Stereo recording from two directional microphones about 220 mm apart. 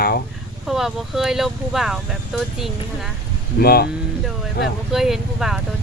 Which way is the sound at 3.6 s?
45° left (ahead or behind).